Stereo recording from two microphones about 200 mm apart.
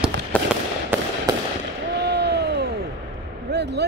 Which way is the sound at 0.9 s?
10° right (ahead or behind).